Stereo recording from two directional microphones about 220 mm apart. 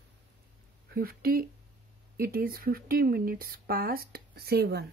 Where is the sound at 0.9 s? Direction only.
45° right (ahead or behind).